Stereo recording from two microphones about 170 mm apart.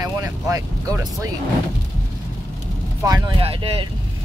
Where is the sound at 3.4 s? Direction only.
35° right (ahead or behind).